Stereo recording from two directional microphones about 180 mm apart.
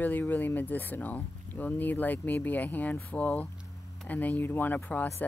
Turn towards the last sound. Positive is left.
turn(degrees=10)  # may be behind; listen again after turning